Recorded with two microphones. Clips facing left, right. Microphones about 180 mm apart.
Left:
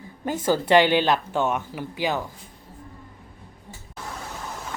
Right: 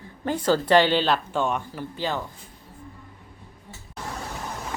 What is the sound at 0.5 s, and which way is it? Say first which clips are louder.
Speech: left 1 dB; 15° left (ahead or behind).